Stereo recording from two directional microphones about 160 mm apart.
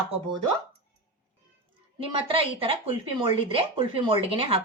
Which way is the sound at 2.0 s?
35° right (ahead or behind).